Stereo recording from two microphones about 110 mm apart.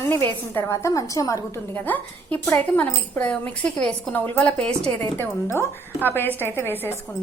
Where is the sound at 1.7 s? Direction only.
15° left (ahead or behind).